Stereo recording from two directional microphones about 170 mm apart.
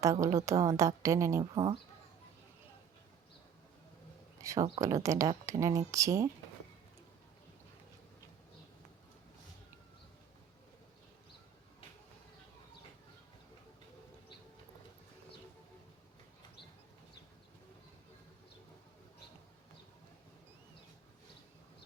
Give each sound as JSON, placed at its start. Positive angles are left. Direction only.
{"t": 0.0, "sound": "a woman's voice", "side_deg": -20}
{"t": 4.4, "sound": "a sound", "side_deg": -20}
{"t": 4.8, "sound": "a woman's voice", "side_deg": -20}